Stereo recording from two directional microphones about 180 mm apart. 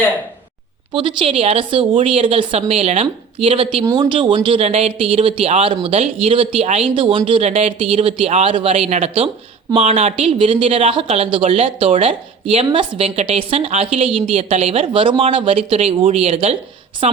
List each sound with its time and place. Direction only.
0.9 s speech: 30° right (ahead or behind)